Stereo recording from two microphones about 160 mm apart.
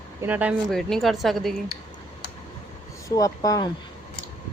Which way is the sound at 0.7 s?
Centre (ahead or behind).